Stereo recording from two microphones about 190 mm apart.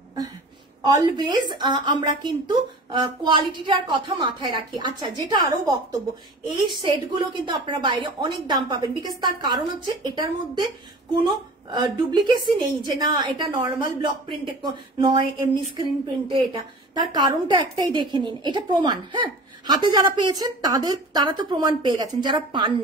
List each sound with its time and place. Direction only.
0.8 s a woman's voice: 20° right (ahead or behind)
16.9 s a woman's voice: 20° right (ahead or behind)